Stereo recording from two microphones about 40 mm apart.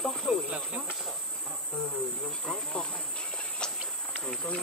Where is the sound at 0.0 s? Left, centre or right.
Centre.